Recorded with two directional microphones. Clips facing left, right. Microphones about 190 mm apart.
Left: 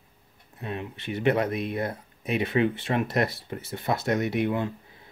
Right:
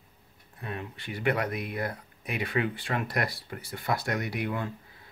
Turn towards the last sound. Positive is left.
turn(degrees=25)  # may be behind; listen again after turning